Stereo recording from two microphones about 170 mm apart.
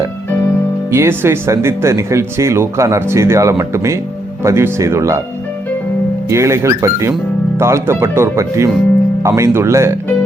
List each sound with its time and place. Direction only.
0.9 s speech: 15° right (ahead or behind)
6.2 s speech: 15° right (ahead or behind)